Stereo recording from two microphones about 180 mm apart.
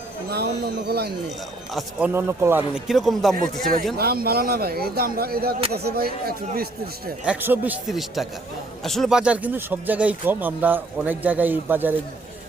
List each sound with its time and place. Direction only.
0.3 s speech: 60° right (ahead or behind)
1.7 s speech: 5° right (ahead or behind)
3.6 s speech: 55° right (ahead or behind)
7.3 s speech: 10° right (ahead or behind)